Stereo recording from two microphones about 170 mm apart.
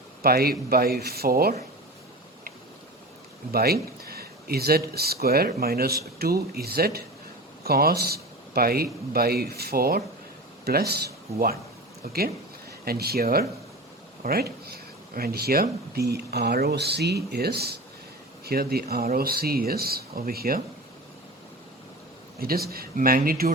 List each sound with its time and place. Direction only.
0.2 s speech: 65° right (ahead or behind)
3.5 s speech: 65° right (ahead or behind)
22.4 s speech: 65° right (ahead or behind)